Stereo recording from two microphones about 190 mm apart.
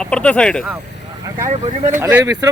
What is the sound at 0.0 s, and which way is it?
Speech, 5° left (ahead or behind).